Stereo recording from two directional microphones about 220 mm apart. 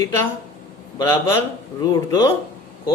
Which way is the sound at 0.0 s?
15° left (ahead or behind).